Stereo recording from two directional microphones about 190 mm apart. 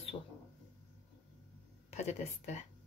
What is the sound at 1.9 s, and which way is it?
Speech, 35° left (ahead or behind).